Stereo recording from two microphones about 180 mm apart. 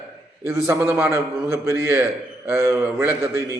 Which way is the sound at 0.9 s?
15° right (ahead or behind).